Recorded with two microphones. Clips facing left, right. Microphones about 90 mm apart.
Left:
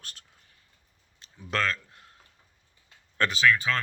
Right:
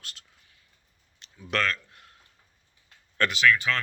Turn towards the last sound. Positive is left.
turn(degrees=30)  # may be behind; listen again after turning